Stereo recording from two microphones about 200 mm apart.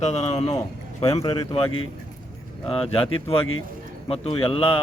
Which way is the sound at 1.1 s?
20° left (ahead or behind).